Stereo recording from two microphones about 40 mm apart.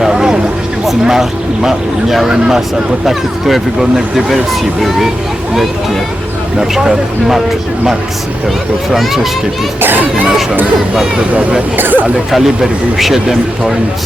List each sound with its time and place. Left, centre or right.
0.0 s vehicle: centre
1.0 s speech: centre
6.6 s speech: centre
8.9 s speech: centre
9.8 s a child's voice: right
11.8 s a child's voice: right